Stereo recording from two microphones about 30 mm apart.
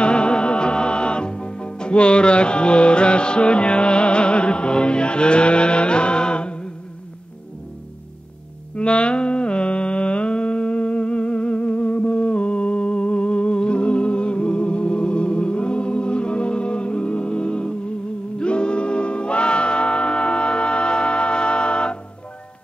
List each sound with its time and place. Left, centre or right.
0.0 s music: left
8.7 s mantra: left
18.4 s music: left